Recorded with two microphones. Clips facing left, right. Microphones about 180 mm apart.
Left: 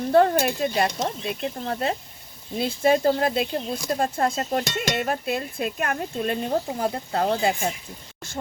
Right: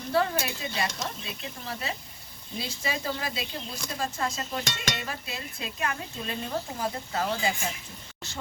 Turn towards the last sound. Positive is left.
turn(degrees=55)  # may be behind; listen again after turning